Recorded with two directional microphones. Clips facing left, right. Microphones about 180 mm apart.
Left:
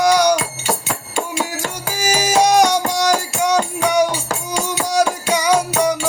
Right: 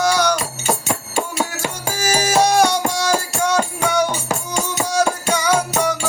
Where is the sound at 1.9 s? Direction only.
15° left (ahead or behind).